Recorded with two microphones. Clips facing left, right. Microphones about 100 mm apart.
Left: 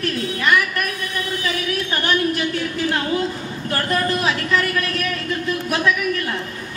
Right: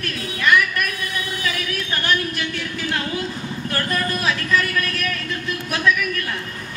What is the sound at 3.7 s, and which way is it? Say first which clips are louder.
A woman's voice: left 4 dB; 30° left (ahead or behind).